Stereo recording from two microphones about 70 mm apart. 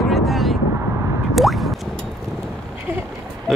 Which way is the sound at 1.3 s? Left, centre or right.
Centre.